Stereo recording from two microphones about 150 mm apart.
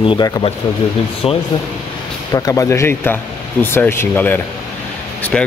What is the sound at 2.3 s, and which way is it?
Speech, 25° left (ahead or behind).